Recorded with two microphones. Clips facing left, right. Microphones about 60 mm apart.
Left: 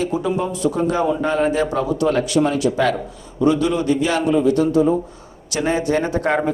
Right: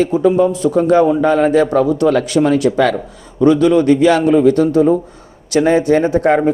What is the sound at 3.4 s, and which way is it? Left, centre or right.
Speech, right.